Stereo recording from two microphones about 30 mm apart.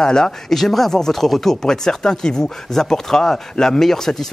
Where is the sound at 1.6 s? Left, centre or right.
Centre.